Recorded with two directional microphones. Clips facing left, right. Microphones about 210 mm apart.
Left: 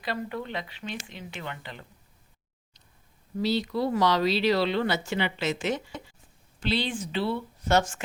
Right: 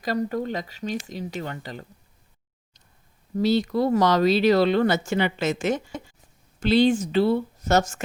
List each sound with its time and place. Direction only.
0.0 s speech: 40° right (ahead or behind)
3.3 s speech: 45° right (ahead or behind)